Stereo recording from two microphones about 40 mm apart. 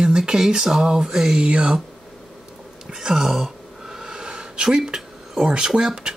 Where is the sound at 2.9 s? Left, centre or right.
Centre.